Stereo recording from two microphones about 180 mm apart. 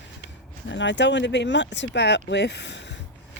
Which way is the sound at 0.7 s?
90° left.